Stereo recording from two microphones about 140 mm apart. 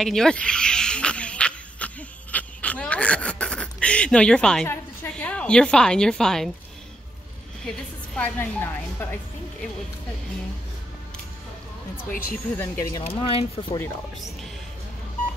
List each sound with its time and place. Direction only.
0.0 s a sound: 5° left (ahead or behind)
4.6 s a woman's voice: 10° left (ahead or behind)
7.6 s a woman's voice: 5° left (ahead or behind)
12.1 s a woman's voice: 90° left
12.5 s speech: 20° left (ahead or behind)
13.0 s speech: 45° left (ahead or behind)